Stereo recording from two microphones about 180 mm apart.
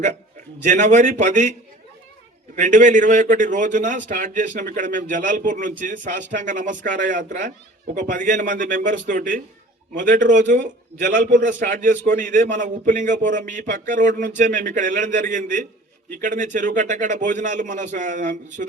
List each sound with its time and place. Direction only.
0.6 s a man's voice: 45° right (ahead or behind)
2.6 s a man's voice: 45° right (ahead or behind)